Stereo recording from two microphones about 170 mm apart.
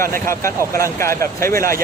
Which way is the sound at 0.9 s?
15° left (ahead or behind).